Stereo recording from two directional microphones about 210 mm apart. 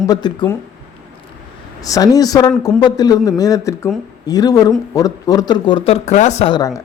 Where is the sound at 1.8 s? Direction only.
15° left (ahead or behind).